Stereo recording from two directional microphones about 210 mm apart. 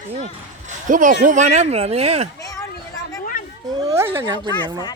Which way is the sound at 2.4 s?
15° left (ahead or behind).